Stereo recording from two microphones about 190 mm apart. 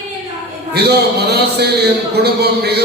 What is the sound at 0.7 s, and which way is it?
A man's voice, 60° right (ahead or behind).